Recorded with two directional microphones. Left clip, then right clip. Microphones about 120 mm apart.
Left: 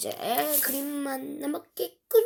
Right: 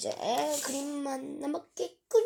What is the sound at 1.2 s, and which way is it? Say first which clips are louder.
Speech: left 2 dB; 45° left (ahead or behind).